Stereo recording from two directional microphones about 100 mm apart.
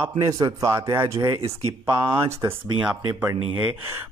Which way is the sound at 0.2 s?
35° right (ahead or behind).